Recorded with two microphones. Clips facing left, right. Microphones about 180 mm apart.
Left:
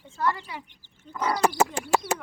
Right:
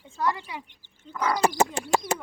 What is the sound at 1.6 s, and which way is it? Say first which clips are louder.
Bird: even; 5° left (ahead or behind).